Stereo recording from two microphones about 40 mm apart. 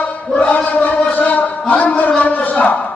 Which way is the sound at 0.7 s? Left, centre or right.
Left.